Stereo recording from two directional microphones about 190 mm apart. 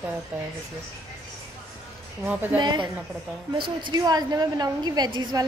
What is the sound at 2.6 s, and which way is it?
A woman's voice, 25° right (ahead or behind).